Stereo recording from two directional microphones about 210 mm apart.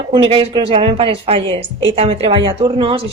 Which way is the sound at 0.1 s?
25° right (ahead or behind).